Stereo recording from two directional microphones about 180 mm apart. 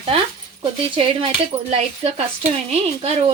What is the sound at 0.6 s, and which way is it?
A woman's voice, 30° right (ahead or behind).